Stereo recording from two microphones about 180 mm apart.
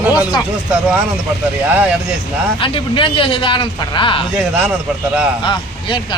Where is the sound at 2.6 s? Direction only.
30° left (ahead or behind).